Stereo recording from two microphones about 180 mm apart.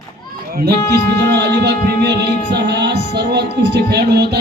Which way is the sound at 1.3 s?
65° right (ahead or behind).